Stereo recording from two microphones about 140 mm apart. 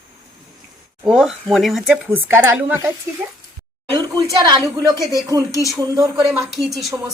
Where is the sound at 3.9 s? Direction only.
30° right (ahead or behind).